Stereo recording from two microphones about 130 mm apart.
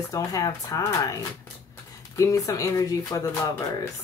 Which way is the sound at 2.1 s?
25° left (ahead or behind).